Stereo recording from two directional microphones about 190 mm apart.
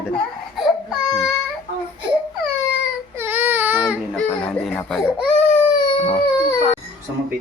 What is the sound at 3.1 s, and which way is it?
Baby cry, 10° right (ahead or behind).